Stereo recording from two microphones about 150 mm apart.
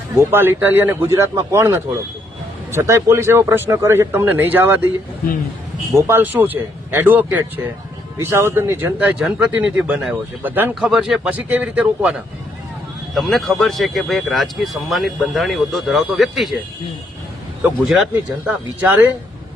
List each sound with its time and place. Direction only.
0.2 s a man's voice: 15° right (ahead or behind)
6.0 s a man's voice: 15° right (ahead or behind); by 16.6 s centre (ahead or behind)
17.6 s a man's voice: 5° right (ahead or behind)